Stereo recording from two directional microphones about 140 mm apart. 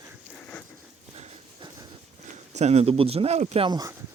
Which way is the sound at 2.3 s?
55° right (ahead or behind).